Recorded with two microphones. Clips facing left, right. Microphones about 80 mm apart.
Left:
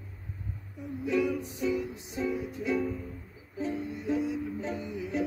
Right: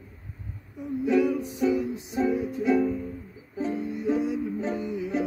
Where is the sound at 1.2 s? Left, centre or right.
Right.